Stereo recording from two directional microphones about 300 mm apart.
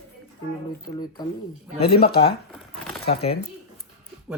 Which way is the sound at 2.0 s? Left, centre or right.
Centre.